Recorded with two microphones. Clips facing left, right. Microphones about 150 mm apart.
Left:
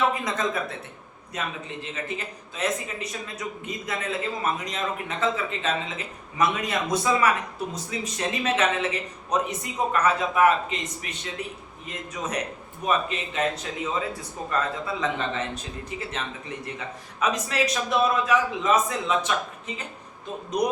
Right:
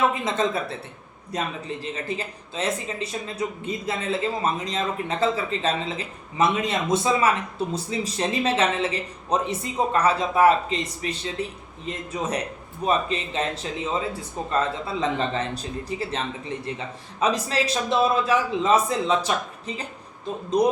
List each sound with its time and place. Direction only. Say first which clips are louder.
0.1 s speech: right 3 dB; 30° right (ahead or behind)